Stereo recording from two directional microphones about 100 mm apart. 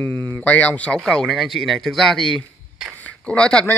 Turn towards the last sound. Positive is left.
turn(degrees=10)  # may be behind; listen again after turning